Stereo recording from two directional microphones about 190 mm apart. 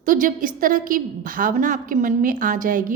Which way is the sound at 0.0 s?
45° right (ahead or behind).